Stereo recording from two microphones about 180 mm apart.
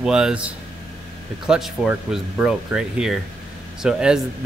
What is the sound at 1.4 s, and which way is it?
Speech, centre (ahead or behind).